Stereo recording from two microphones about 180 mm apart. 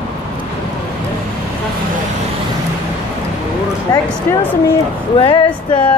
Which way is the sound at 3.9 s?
15° left (ahead or behind).